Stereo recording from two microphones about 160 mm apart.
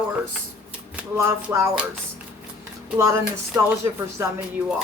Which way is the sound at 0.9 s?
15° right (ahead or behind).